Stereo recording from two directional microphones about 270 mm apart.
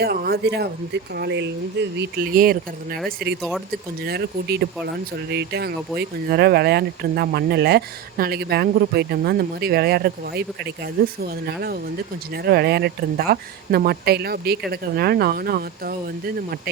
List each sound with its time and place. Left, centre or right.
0.0 s speech: right